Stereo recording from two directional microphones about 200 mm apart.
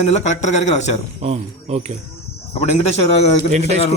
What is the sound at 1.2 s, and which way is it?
Speech, 35° right (ahead or behind).